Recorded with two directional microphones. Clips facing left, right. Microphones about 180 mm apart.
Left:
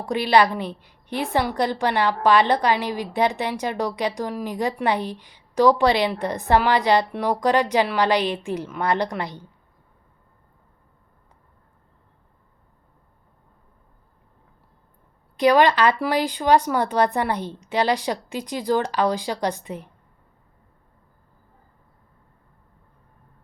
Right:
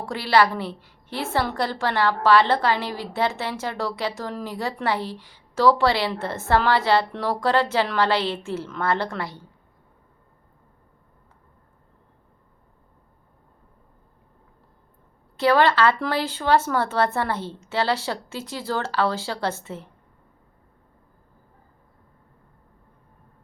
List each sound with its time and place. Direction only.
0.0 s a woman's voice: 20° left (ahead or behind)
15.4 s a woman's voice: 15° left (ahead or behind)